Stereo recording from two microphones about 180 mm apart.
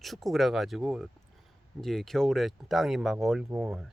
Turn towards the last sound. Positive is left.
turn(degrees=-15)  # may be behind; listen again after turning